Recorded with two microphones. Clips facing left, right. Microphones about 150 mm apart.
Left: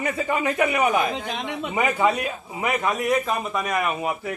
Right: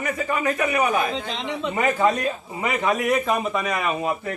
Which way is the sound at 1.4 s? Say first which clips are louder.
Right 2 dB; 10° left (ahead or behind).